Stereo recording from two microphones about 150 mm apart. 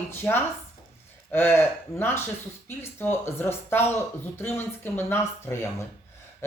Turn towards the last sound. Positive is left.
turn(degrees=15)  # may be behind; listen again after turning